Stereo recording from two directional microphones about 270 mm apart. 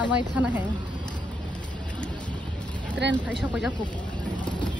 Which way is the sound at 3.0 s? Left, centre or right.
Right.